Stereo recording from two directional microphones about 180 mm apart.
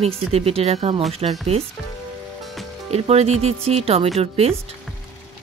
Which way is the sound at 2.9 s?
35° right (ahead or behind).